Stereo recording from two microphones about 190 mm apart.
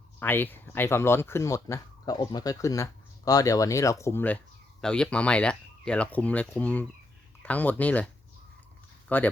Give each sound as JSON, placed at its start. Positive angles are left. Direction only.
{"t": 0.2, "sound": "speech", "side_deg": 10}